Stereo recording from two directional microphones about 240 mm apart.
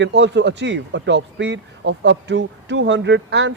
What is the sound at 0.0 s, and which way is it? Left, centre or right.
Speech, right.